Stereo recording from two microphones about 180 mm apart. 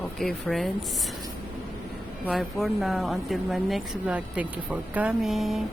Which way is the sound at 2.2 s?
Centre (ahead or behind).